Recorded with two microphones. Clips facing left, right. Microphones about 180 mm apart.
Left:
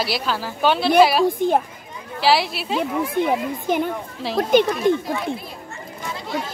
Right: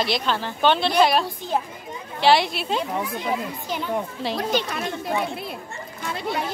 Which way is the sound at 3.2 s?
55° left (ahead or behind).